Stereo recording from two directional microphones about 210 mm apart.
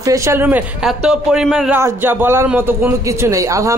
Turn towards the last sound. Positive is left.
turn(degrees=-15)  # may be behind; listen again after turning